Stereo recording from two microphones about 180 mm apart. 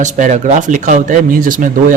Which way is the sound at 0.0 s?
45° right (ahead or behind).